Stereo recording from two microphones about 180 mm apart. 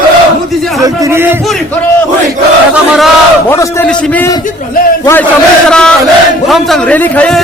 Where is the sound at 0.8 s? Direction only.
15° right (ahead or behind).